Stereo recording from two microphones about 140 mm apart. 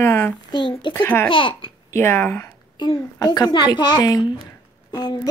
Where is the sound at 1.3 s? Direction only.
35° left (ahead or behind).